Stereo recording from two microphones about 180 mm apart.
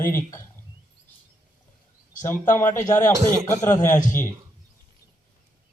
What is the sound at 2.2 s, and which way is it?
Speech, 15° left (ahead or behind).